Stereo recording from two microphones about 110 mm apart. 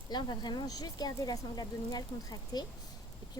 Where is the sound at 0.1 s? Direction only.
40° left (ahead or behind).